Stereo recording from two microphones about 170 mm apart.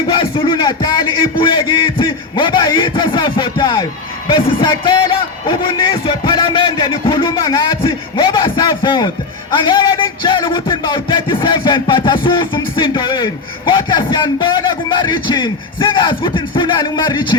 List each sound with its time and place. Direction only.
0.1 s a man's voice: 30° left (ahead or behind)